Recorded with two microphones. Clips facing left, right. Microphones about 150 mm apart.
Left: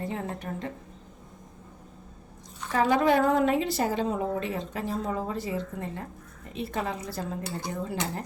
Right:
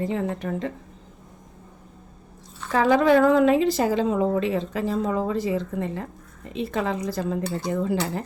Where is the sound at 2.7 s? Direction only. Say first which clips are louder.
Right 5 dB; 90° right.